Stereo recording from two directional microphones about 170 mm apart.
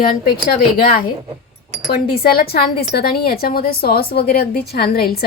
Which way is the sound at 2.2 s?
65° left (ahead or behind).